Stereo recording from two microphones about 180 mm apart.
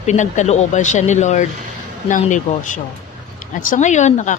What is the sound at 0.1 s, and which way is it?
A woman's voice, 40° left (ahead or behind).